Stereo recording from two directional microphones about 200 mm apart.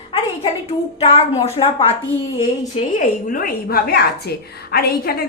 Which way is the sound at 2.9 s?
45° left (ahead or behind).